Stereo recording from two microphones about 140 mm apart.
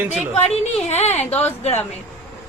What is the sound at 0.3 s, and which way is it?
A woman's voice, 50° left (ahead or behind).